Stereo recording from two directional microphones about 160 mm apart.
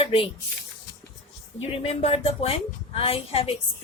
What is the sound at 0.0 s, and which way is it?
Speech, 35° left (ahead or behind).